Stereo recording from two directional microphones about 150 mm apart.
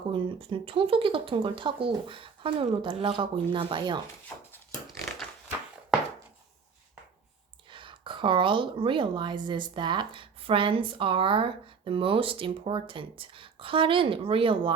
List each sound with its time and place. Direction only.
0.1 s a woman's voice: 35° right (ahead or behind)
4.9 s pig: centre (ahead or behind)
7.7 s a woman's voice: 35° right (ahead or behind)